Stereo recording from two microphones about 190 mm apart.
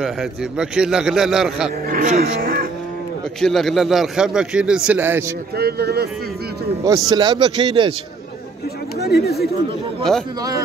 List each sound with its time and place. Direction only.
0.0 s a man's voice: 5° right (ahead or behind)
1.9 s speech: 50° right (ahead or behind)
3.3 s a man's voice: centre (ahead or behind)
5.6 s speech: 55° right (ahead or behind)
6.8 s speech: 20° right (ahead or behind)
9.0 s speech: 60° left (ahead or behind)